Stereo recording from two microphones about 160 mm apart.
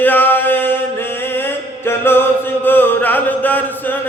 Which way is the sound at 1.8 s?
15° left (ahead or behind).